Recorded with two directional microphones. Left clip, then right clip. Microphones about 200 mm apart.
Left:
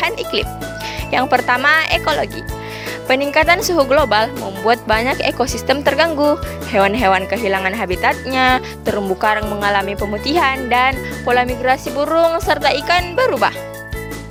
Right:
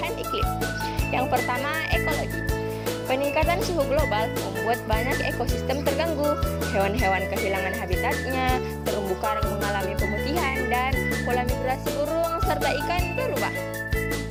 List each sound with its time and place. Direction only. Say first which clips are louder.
1.1 s speech: left 11 dB; 50° left (ahead or behind)